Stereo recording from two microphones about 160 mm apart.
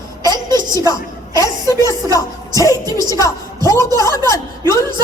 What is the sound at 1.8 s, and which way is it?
Speech, 25° right (ahead or behind).